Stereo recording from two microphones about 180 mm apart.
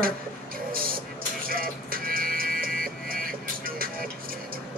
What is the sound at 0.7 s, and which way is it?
Music, 55° right (ahead or behind).